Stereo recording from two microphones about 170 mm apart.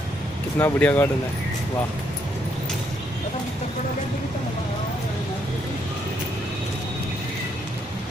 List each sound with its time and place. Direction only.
0.6 s speech: 10° left (ahead or behind)